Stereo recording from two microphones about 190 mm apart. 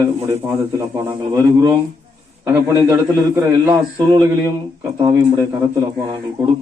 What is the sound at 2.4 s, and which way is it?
A man's voice, 15° right (ahead or behind).